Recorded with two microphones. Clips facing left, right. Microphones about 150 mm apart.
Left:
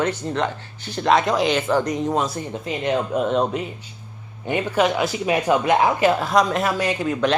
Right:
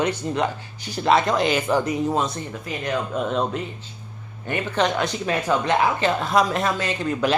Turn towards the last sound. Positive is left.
turn(degrees=10)  # may be behind; listen again after turning